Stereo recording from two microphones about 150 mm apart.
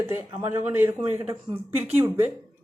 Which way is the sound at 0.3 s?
15° right (ahead or behind).